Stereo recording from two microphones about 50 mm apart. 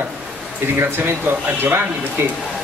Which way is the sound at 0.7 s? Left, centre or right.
Right.